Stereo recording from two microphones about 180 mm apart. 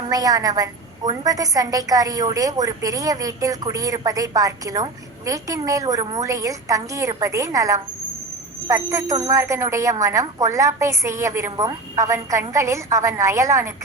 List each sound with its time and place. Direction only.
0.1 s a woman's voice: 20° right (ahead or behind)